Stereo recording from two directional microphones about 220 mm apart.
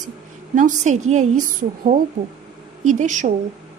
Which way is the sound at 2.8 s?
35° right (ahead or behind).